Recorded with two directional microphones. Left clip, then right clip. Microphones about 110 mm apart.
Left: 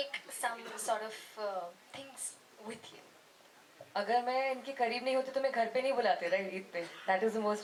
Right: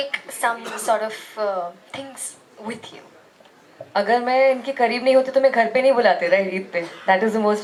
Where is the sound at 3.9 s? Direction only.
20° right (ahead or behind).